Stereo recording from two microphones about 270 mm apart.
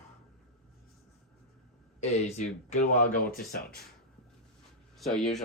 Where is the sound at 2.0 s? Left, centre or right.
Left.